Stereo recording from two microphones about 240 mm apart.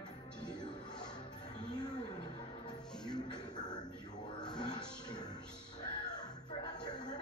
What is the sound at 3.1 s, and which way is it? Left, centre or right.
Music, centre.